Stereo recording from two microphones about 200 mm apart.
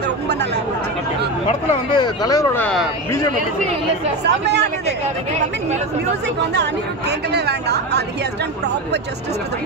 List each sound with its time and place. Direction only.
1.5 s speech: 25° left (ahead or behind)
2.6 s speech: centre (ahead or behind)
4.2 s speech: 55° right (ahead or behind)
6.5 s speech: 55° right (ahead or behind)